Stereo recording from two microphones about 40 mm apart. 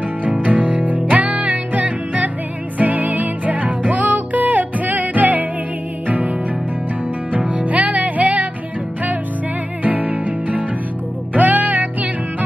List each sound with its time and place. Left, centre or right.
0.2 s music: right
7.3 s music: right
9.8 s music: right